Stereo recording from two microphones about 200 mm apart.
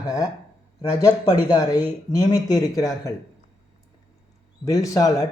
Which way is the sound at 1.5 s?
20° left (ahead or behind).